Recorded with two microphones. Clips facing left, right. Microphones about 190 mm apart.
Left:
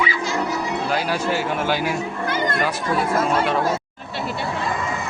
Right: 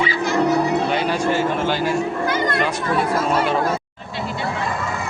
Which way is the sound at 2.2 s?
55° left (ahead or behind).